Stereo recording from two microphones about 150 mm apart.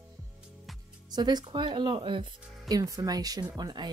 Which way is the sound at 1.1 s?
25° right (ahead or behind).